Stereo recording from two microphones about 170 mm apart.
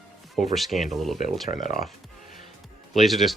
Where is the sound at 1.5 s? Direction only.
25° right (ahead or behind).